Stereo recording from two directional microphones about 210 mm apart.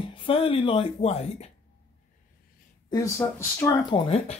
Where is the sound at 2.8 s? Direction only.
15° left (ahead or behind).